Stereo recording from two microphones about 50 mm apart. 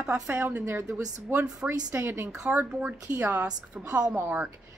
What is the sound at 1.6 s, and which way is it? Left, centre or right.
Speech, right.